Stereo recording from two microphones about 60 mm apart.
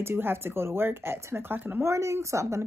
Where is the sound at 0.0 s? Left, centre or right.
Right.